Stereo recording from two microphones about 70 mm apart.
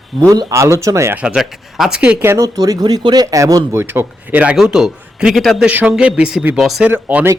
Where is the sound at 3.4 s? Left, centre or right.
Right.